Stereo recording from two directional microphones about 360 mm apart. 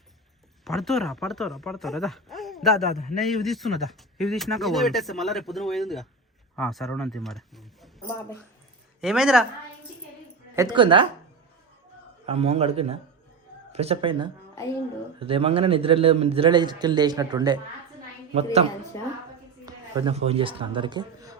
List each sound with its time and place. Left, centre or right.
0.6 s speech: centre
10.5 s a man's voice: centre
12.2 s a man's voice: centre
18.9 s speech: centre
19.6 s speech: centre